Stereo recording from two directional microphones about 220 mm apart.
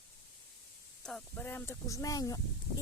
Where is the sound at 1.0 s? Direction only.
5° left (ahead or behind).